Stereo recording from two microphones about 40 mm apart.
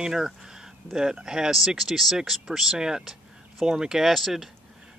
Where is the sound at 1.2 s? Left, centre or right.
Centre.